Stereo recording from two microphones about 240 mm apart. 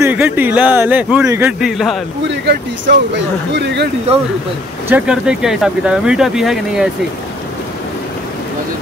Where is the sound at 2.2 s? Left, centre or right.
Right.